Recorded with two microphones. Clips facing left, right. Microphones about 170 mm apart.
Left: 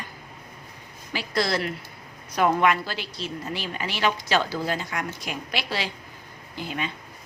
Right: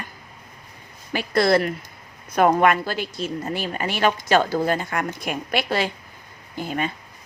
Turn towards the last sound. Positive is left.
turn(degrees=-45)  # may be behind; listen again after turning